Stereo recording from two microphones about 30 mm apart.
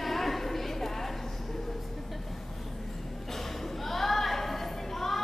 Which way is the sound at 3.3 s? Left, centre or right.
Centre.